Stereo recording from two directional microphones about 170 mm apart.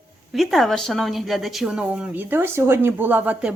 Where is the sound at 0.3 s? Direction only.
Centre (ahead or behind).